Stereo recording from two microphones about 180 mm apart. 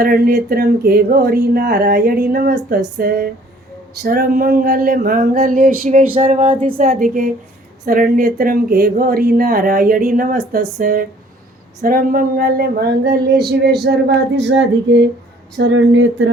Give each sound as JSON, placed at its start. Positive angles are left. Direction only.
{"t": 0.0, "sound": "speech", "side_deg": -55}
{"t": 4.0, "sound": "a sound", "side_deg": -55}
{"t": 11.8, "sound": "speech", "side_deg": -50}